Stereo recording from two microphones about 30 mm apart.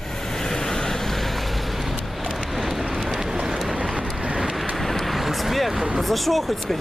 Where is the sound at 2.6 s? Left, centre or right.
Centre.